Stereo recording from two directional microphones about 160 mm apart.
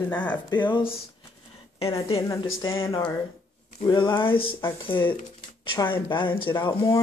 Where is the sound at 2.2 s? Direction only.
20° left (ahead or behind).